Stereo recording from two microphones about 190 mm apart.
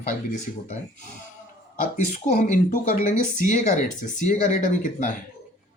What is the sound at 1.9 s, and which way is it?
Speech, 40° left (ahead or behind).